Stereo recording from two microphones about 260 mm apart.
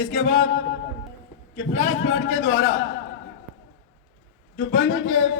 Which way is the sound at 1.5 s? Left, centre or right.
Left.